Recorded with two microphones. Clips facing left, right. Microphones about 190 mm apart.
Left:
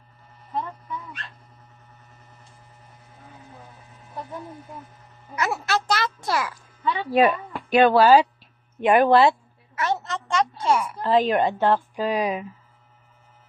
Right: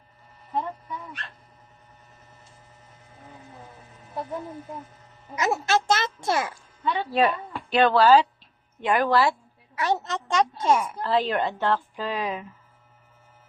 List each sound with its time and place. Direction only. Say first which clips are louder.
5.3 s a child's voice: right 2 dB; 20° right (ahead or behind)
7.1 s a woman's voice: left 5 dB; 10° left (ahead or behind)
9.7 s speech: even; 15° right (ahead or behind)
11.0 s a woman's voice: left 4 dB; 15° left (ahead or behind)